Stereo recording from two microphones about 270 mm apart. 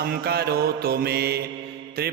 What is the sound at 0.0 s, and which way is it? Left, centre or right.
Mantra, right.